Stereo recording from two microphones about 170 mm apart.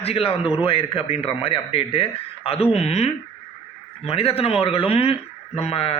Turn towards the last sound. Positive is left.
turn(degrees=35)  # may be behind; listen again after turning